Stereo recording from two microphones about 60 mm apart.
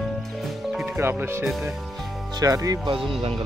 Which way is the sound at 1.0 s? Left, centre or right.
Right.